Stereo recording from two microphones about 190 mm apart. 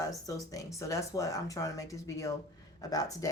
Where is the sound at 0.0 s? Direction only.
20° left (ahead or behind).